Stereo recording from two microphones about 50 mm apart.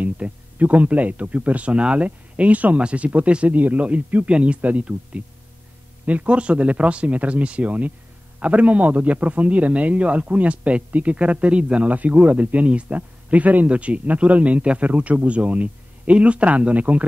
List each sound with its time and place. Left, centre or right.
0.0 s a man's voice: right